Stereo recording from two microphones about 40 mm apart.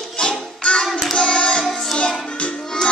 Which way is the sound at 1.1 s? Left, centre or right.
Left.